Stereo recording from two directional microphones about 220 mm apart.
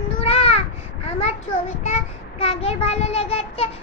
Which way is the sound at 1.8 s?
30° left (ahead or behind).